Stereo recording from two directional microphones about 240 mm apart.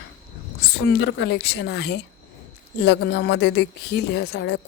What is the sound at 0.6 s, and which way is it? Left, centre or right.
A woman's voice, left.